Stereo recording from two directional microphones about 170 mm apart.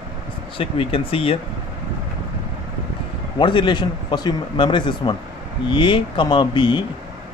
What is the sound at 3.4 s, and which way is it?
Speech, 30° left (ahead or behind).